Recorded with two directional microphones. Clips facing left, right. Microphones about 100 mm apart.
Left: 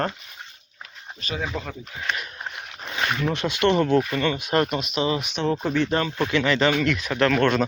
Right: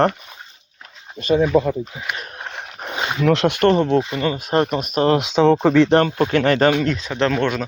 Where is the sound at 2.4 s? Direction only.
65° right (ahead or behind).